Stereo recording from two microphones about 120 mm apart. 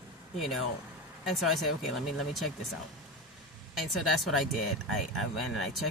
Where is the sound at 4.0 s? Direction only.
Centre (ahead or behind).